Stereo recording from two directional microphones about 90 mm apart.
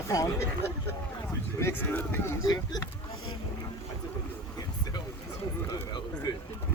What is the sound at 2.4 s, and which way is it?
Speech, 45° left (ahead or behind).